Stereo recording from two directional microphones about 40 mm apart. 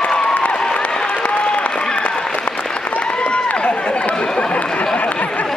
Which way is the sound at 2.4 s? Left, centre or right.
Left.